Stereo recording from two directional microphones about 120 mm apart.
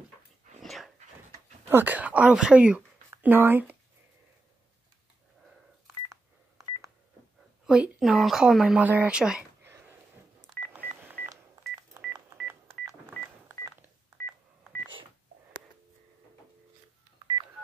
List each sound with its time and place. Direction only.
0.6 s dog: centre (ahead or behind)
1.7 s speech: 15° right (ahead or behind)
7.6 s speech: 5° right (ahead or behind)
9.6 s a sound: 20° right (ahead or behind)